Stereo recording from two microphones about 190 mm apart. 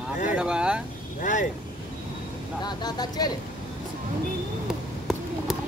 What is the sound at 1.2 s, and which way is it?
Vehicle, 45° left (ahead or behind).